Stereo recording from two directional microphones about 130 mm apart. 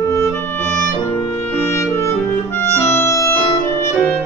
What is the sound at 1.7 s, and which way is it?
Music, 20° left (ahead or behind).